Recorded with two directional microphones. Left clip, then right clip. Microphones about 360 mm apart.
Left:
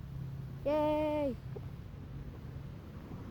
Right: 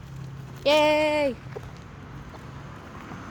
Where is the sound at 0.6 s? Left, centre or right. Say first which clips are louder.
Right 12 dB; centre.